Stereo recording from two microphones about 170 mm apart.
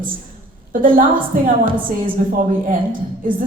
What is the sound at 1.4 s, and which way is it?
A woman's voice, 55° right (ahead or behind).